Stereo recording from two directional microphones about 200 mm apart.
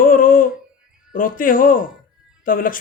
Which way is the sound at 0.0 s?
45° left (ahead or behind).